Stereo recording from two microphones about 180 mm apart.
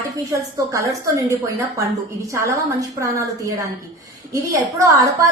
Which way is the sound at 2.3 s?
15° right (ahead or behind).